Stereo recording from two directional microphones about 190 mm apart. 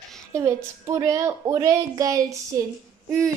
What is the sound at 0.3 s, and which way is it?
A woman's voice, 15° right (ahead or behind).